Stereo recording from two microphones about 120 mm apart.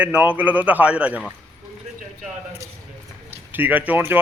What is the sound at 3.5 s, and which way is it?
Speech, 15° right (ahead or behind).